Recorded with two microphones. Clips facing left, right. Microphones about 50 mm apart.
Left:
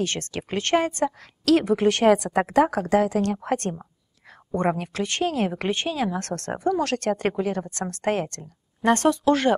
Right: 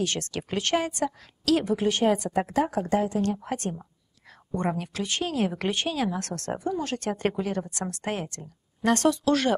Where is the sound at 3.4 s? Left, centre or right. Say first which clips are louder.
Left 5 dB; left.